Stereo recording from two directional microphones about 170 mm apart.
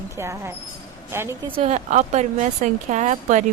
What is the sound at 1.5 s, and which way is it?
A woman's voice, 35° right (ahead or behind).